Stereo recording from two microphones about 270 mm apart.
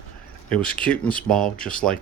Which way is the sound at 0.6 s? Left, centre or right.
Centre.